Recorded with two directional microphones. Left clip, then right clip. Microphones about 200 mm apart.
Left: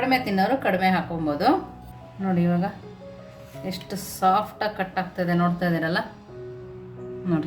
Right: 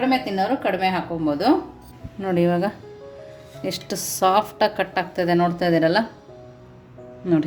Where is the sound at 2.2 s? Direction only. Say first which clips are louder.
Right 6 dB; 40° right (ahead or behind).